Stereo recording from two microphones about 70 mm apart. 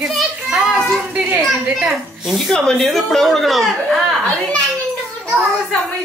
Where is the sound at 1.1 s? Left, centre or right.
Centre.